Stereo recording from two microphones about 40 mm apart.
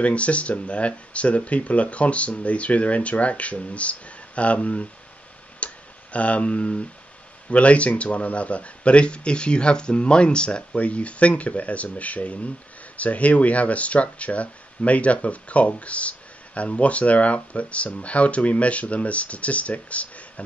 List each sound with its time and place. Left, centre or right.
0.0 s speech: left
5.6 s tick: left
6.1 s speech: left